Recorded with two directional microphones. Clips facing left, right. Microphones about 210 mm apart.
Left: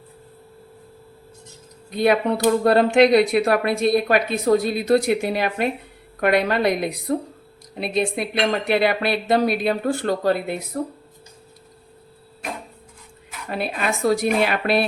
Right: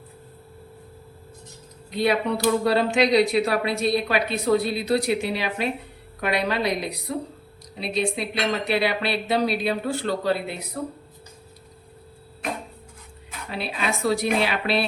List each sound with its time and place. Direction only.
2.0 s speech: 50° left (ahead or behind)
13.5 s speech: 50° left (ahead or behind)